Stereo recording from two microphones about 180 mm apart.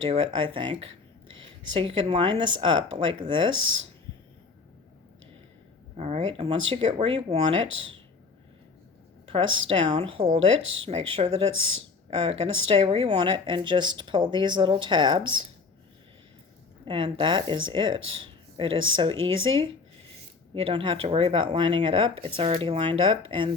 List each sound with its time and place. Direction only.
0.1 s speech: 30° right (ahead or behind)
6.0 s speech: 35° right (ahead or behind)
7.7 s speech: 90° right
9.2 s speech: 30° right (ahead or behind)
16.8 s speech: 30° right (ahead or behind)